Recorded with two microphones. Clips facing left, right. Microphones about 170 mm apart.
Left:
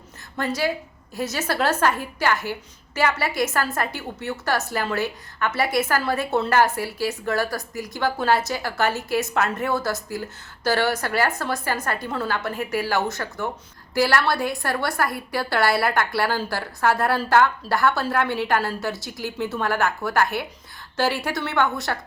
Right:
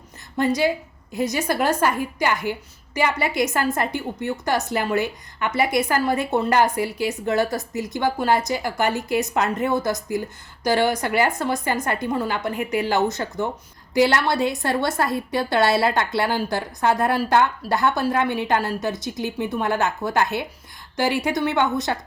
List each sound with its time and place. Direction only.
0.3 s a woman's voice: 15° right (ahead or behind)